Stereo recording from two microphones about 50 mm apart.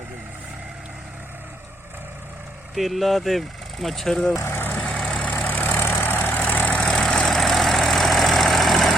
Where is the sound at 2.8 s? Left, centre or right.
Centre.